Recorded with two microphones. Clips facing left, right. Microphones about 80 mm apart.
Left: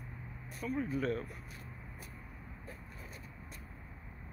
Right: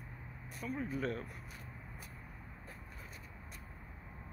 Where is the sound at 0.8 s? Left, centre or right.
Right.